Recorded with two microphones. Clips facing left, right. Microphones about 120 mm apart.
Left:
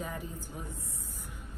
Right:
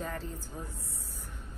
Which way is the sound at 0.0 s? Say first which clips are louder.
Right 1 dB; 15° left (ahead or behind).